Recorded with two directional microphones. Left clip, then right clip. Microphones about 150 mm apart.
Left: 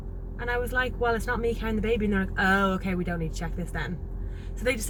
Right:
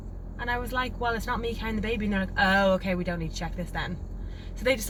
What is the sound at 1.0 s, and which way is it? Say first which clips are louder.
Speech: left 2 dB; 20° right (ahead or behind).